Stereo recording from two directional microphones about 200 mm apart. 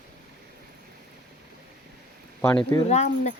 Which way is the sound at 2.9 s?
35° left (ahead or behind).